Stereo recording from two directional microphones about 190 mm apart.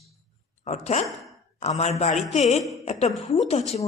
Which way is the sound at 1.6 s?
35° left (ahead or behind).